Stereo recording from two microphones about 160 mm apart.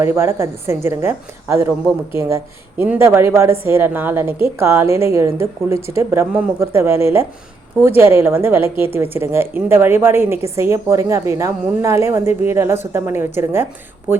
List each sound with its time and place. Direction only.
0.0 s a woman's voice: 15° right (ahead or behind)